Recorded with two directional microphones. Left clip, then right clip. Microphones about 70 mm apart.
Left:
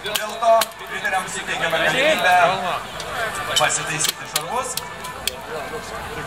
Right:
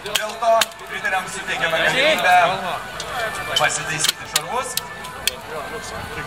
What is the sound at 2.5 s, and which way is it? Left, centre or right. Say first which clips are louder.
Speech: left 1 dB; left.